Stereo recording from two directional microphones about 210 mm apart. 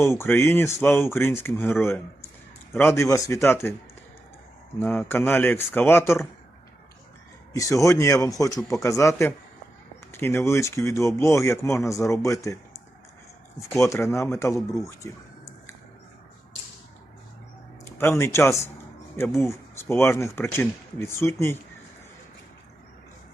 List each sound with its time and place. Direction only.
0.0 s speech: 10° left (ahead or behind)
4.8 s speech: 10° left (ahead or behind)
7.5 s speech: 15° left (ahead or behind)
17.9 s speech: 10° left (ahead or behind)